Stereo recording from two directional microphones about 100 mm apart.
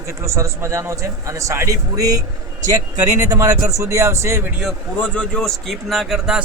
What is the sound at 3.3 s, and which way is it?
A man's voice, 35° right (ahead or behind).